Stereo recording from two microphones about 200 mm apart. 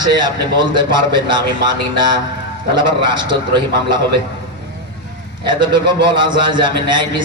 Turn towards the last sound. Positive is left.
turn(degrees=-20)  # may be behind; listen again after turning